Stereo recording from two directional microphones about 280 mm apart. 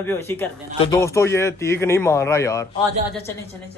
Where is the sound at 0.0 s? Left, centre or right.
Centre.